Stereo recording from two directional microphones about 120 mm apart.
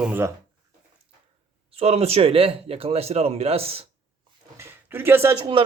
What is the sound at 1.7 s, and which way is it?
Speech, 60° right (ahead or behind).